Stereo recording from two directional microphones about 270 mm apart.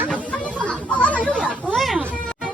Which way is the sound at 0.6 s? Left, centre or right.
Centre.